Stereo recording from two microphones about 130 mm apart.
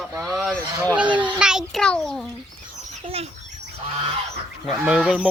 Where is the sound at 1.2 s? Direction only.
5° right (ahead or behind).